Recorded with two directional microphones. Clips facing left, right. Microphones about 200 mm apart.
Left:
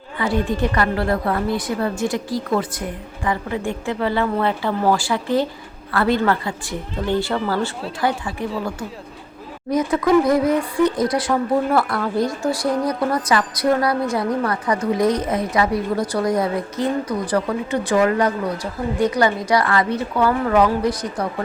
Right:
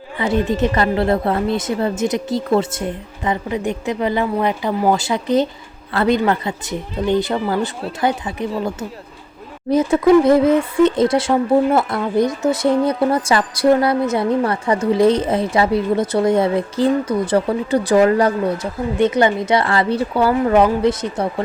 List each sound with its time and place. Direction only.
0.2 s speech: 20° right (ahead or behind)
9.6 s speech: 25° right (ahead or behind)